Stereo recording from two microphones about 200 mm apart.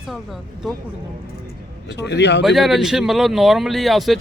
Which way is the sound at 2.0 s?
60° left (ahead or behind).